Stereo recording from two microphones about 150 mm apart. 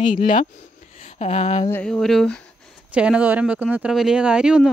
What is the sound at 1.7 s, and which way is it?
Speech, 5° left (ahead or behind).